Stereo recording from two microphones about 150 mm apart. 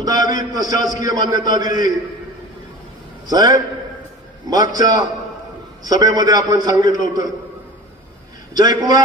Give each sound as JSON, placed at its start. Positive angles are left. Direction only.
{"t": 0.0, "sound": "a man's voice", "side_deg": -25}
{"t": 3.3, "sound": "a man's voice", "side_deg": -25}
{"t": 8.5, "sound": "a man's voice", "side_deg": -25}